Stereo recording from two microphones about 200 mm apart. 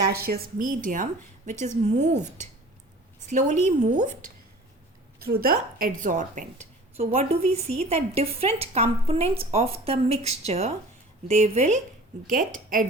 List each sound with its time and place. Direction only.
0.1 s a woman's voice: 50° right (ahead or behind)
3.2 s a woman's voice: 35° right (ahead or behind)
5.2 s a woman's voice: 50° right (ahead or behind)